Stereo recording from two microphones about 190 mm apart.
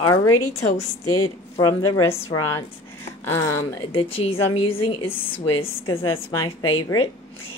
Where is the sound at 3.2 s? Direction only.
15° left (ahead or behind).